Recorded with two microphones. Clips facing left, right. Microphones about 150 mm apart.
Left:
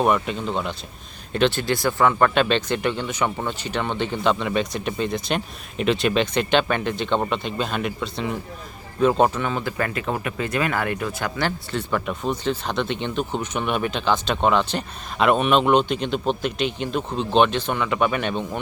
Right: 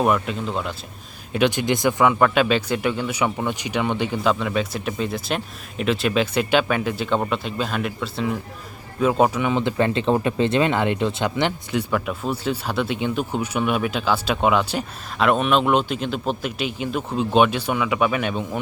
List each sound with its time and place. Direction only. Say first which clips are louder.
0.0 s speech: even; centre (ahead or behind)
1.3 s speech: right 1 dB; 10° right (ahead or behind)
2.1 s speech: right 1 dB; 5° right (ahead or behind)
9.6 s speech: right 5 dB; 20° right (ahead or behind)
11.9 s speech: even; centre (ahead or behind)